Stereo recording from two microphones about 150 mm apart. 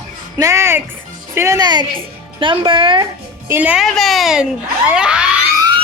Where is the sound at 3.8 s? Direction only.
Centre (ahead or behind).